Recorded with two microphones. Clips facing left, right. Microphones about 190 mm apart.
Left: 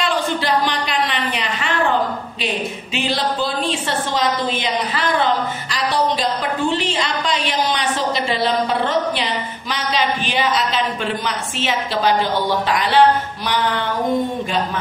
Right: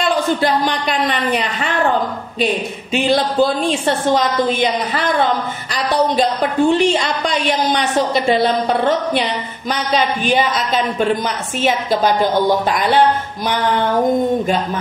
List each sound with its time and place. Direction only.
0.0 s a woman's voice: 45° right (ahead or behind)
5.9 s a woman's voice: 50° right (ahead or behind)